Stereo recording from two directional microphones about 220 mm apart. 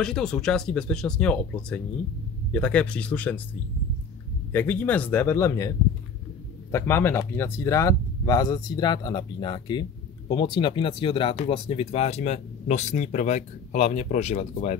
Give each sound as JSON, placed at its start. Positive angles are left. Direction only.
{"t": 0.0, "sound": "speech", "side_deg": 0}
{"t": 4.5, "sound": "speech", "side_deg": 10}